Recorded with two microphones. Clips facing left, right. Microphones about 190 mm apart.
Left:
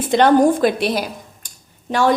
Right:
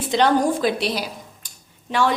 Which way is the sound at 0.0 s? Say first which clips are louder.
Left 5 dB; 50° left (ahead or behind).